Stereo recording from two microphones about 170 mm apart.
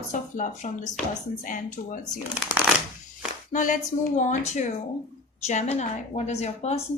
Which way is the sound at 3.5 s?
50° left (ahead or behind).